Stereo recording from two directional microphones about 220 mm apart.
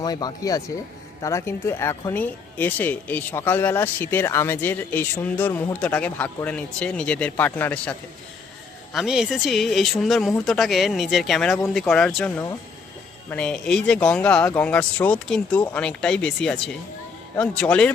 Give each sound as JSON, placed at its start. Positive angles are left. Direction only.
{"t": 0.0, "sound": "speech", "side_deg": 20}